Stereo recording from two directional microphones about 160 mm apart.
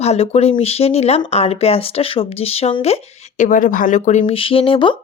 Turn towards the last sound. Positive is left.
turn(degrees=30)  # may be behind; listen again after turning